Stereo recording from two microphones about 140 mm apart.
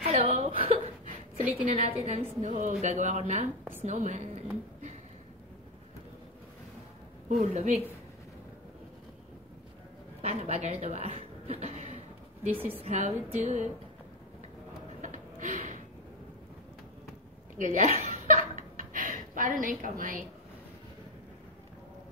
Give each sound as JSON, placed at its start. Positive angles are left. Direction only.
{"t": 0.0, "sound": "a sound", "side_deg": -50}
{"t": 1.7, "sound": "a woman's voice", "side_deg": -45}
{"t": 7.2, "sound": "a woman's voice", "side_deg": -55}
{"t": 10.2, "sound": "a woman's voice", "side_deg": -50}
{"t": 12.5, "sound": "a woman's voice", "side_deg": -15}
{"t": 12.8, "sound": "a woman's voice", "side_deg": -50}
{"t": 15.0, "sound": "a sound", "side_deg": -65}
{"t": 17.6, "sound": "speech", "side_deg": -65}
{"t": 18.0, "sound": "chuckle", "side_deg": -70}